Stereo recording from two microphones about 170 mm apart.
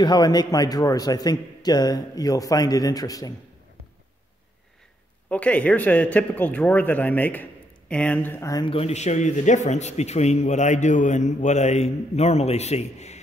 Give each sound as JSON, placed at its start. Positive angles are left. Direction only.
{"t": 0.0, "sound": "a man's voice", "side_deg": 25}
{"t": 5.3, "sound": "speech", "side_deg": 10}
{"t": 8.6, "sound": "a man's voice", "side_deg": 35}